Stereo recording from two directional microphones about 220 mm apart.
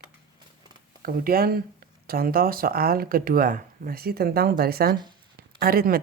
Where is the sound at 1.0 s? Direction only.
40° right (ahead or behind).